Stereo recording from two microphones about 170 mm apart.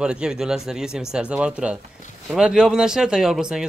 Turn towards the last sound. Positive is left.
turn(degrees=-5)  # may be behind; listen again after turning